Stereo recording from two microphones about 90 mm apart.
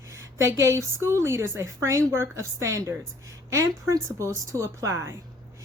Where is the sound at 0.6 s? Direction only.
35° right (ahead or behind).